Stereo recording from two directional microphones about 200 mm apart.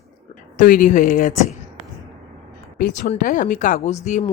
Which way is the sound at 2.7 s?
45° left (ahead or behind).